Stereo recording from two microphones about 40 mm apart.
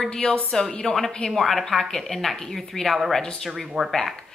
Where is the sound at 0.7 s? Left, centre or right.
Left.